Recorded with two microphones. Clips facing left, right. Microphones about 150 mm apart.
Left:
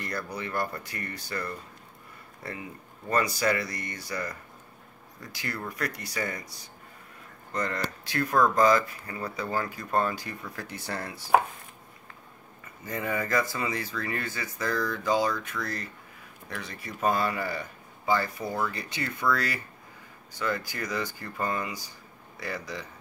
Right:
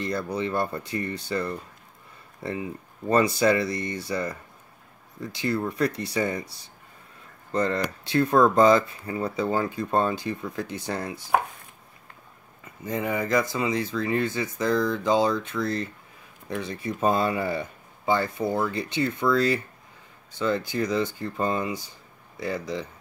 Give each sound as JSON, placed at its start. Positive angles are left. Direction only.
{"t": 0.0, "sound": "speech", "side_deg": -25}
{"t": 12.8, "sound": "speech", "side_deg": -20}